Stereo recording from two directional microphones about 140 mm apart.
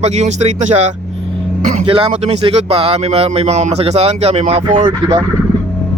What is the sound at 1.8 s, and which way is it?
Speech, 40° right (ahead or behind).